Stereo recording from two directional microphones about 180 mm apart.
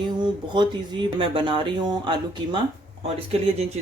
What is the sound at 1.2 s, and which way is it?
Speech, 25° right (ahead or behind).